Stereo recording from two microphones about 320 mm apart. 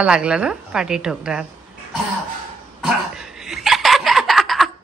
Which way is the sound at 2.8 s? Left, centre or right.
Centre.